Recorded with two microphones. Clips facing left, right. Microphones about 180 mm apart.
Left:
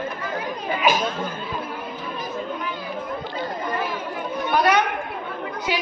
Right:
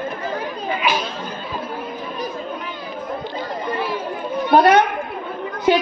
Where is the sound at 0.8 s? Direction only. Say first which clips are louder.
Left 2 dB; 45° left (ahead or behind).